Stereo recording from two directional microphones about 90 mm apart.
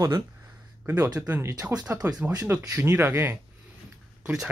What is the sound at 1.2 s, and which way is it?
Speech, 25° right (ahead or behind).